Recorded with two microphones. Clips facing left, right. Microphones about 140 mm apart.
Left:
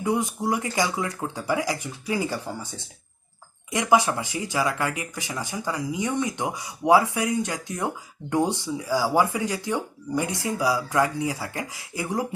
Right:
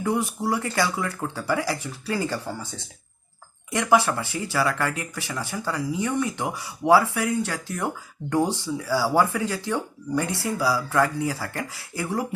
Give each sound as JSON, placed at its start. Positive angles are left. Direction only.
{"t": 0.0, "sound": "speech", "side_deg": 20}